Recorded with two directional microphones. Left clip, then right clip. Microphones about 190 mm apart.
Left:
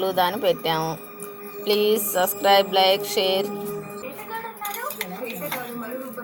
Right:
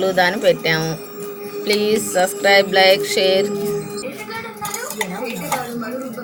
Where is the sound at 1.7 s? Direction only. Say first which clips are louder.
Right 3 dB; 20° left (ahead or behind).